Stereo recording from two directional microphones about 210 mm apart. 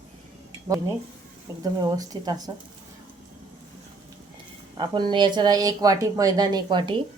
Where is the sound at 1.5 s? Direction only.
15° right (ahead or behind).